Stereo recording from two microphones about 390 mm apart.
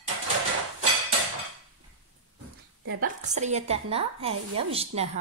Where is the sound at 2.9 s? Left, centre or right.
Centre.